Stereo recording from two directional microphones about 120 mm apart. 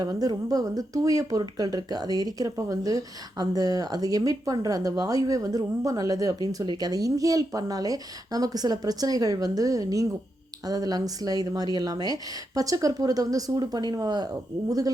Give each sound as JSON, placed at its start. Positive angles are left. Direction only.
{"t": 0.0, "sound": "speech", "side_deg": -35}